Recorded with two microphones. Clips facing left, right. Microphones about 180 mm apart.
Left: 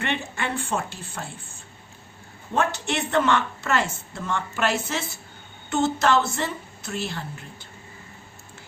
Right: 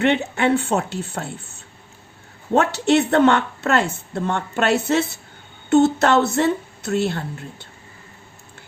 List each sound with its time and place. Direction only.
0.0 s a woman's voice: 65° right (ahead or behind)